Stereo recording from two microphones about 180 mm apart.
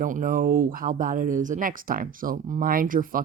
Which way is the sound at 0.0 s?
50° right (ahead or behind).